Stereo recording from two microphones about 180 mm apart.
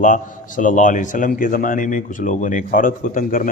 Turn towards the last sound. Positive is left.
turn(degrees=50)  # may be behind; listen again after turning